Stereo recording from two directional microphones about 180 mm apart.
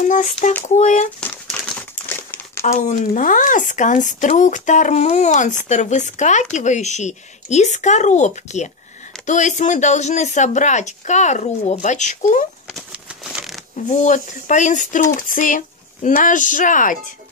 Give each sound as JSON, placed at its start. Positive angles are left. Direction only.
{"t": 0.0, "sound": "child singing", "side_deg": 45}
{"t": 0.7, "sound": "speech", "side_deg": 40}
{"t": 1.2, "sound": "crumpling", "side_deg": 5}
{"t": 2.6, "sound": "speech", "side_deg": 40}
{"t": 12.7, "sound": "crumpling", "side_deg": -5}
{"t": 13.8, "sound": "speech", "side_deg": 40}